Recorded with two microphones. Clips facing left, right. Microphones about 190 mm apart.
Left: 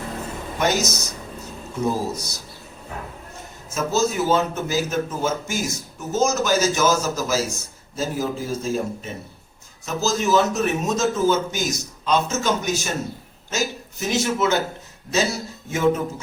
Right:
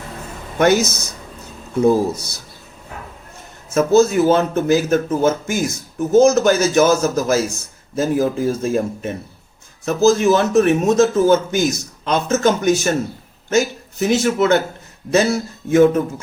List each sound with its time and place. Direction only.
0.6 s a man's voice: 55° right (ahead or behind)
3.8 s a man's voice: 55° right (ahead or behind)